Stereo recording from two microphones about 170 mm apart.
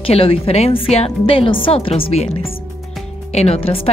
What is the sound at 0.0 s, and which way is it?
Speech, 35° left (ahead or behind).